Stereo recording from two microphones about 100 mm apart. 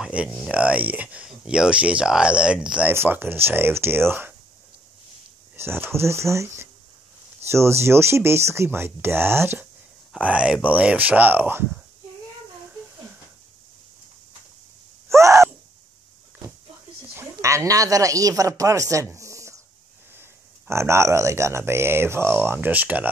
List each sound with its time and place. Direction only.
0.0 s a sound: 10° right (ahead or behind)
0.5 s speech: 15° right (ahead or behind)
2.9 s speech: 20° right (ahead or behind)
5.6 s speech: 25° right (ahead or behind)
10.2 s speech: 10° right (ahead or behind)
15.0 s gasp: 30° right (ahead or behind)
17.1 s speech: 30° right (ahead or behind)